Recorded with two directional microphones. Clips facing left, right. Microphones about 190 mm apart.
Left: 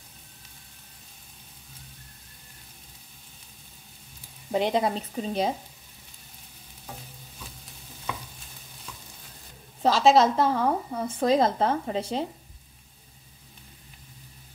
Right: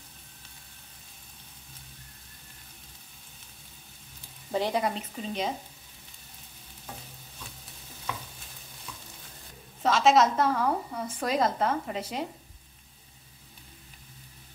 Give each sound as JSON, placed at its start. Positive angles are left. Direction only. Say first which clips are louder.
{"t": 4.5, "sound": "speech", "louder": "left 3 dB", "side_deg": 20}
{"t": 4.9, "sound": "a woman's voice", "louder": "left 5 dB", "side_deg": 35}
{"t": 9.8, "sound": "a woman's voice", "louder": "left 3 dB", "side_deg": 35}